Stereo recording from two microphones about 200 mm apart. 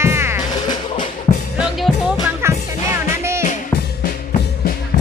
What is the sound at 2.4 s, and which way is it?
Music, 15° right (ahead or behind).